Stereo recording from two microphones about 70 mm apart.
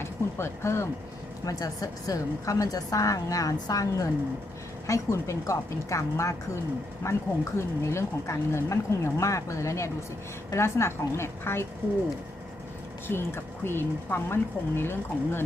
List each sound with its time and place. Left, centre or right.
0.0 s speech: left
1.5 s a woman's voice: left
4.9 s speech: left
13.1 s speech: left